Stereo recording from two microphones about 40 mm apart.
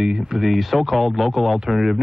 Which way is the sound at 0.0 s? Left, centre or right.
Centre.